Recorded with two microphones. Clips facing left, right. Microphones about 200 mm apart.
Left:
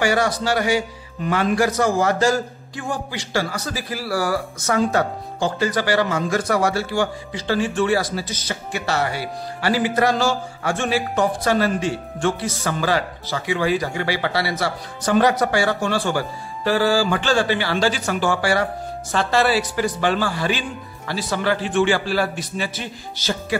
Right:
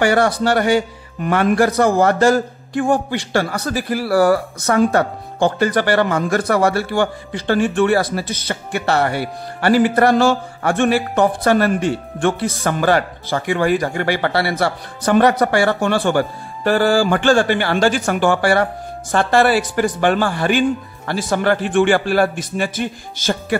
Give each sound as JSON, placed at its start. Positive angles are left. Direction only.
{"t": 0.0, "sound": "a man's voice", "side_deg": -60}